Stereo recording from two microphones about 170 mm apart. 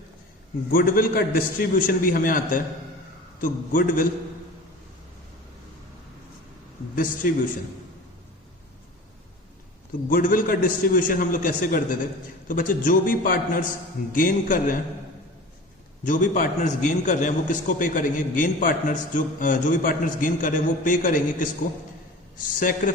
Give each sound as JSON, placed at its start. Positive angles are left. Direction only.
{"t": 0.7, "sound": "a man's voice", "side_deg": 55}
{"t": 6.9, "sound": "a man's voice", "side_deg": 55}
{"t": 10.1, "sound": "a man's voice", "side_deg": 55}
{"t": 16.0, "sound": "a man's voice", "side_deg": 50}